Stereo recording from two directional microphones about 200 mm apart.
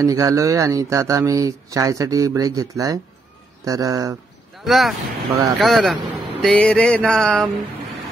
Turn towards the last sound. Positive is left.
turn(degrees=5)  # may be behind; listen again after turning